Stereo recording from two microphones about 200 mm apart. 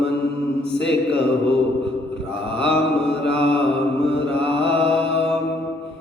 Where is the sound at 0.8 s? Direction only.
25° right (ahead or behind).